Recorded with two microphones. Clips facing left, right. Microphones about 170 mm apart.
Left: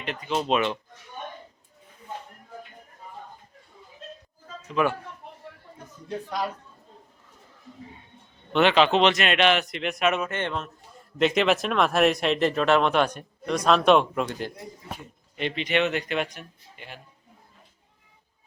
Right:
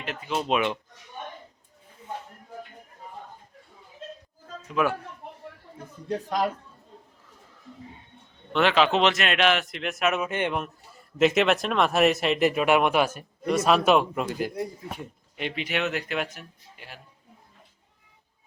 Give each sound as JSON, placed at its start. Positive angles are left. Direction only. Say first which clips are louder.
{"t": 0.0, "sound": "speech", "louder": "left 2 dB", "side_deg": -5}
{"t": 4.7, "sound": "speech", "louder": "left 1 dB", "side_deg": -5}
{"t": 6.1, "sound": "a man's voice", "louder": "right 4 dB", "side_deg": -45}
{"t": 8.5, "sound": "speech", "louder": "left 2 dB", "side_deg": 0}
{"t": 10.2, "sound": "speech", "louder": "right 2 dB", "side_deg": -15}
{"t": 11.2, "sound": "speech", "louder": "right 1 dB", "side_deg": -5}